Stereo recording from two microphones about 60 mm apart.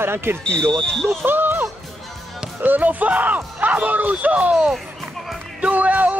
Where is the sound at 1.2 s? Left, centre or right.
Right.